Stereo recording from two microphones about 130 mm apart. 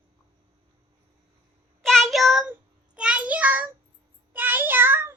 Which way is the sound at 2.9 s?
10° right (ahead or behind).